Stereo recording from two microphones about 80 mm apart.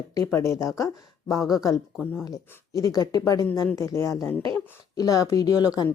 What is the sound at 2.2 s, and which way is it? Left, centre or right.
A woman's voice, left.